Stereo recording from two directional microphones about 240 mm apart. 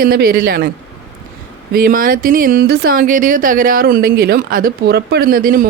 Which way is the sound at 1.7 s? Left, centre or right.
Right.